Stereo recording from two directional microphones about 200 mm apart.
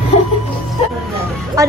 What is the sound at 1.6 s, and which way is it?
Speech, 15° right (ahead or behind).